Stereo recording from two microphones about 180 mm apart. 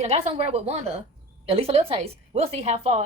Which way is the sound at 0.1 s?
35° right (ahead or behind).